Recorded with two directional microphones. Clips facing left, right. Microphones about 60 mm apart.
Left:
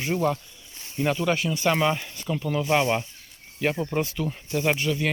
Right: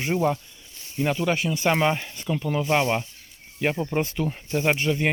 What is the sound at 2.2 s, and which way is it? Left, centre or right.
Speech, centre.